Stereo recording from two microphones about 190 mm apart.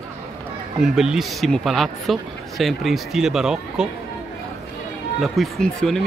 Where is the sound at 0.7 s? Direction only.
Centre (ahead or behind).